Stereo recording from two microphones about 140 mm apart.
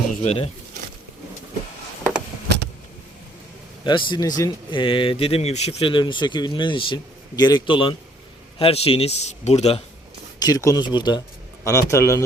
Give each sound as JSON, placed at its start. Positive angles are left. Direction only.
{"t": 0.2, "sound": "a man's voice", "side_deg": 50}
{"t": 3.8, "sound": "speech", "side_deg": 35}
{"t": 5.9, "sound": "a man's voice", "side_deg": 35}
{"t": 10.4, "sound": "speech", "side_deg": 25}
{"t": 11.6, "sound": "speech", "side_deg": 20}